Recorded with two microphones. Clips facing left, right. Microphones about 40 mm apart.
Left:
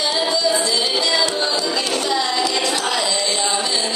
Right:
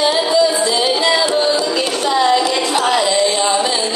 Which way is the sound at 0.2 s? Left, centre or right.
Right.